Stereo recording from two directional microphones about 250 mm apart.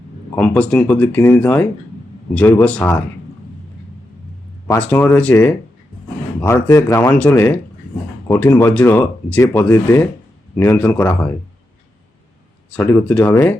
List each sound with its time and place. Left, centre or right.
0.3 s speech: centre
4.7 s speech: centre
12.7 s speech: centre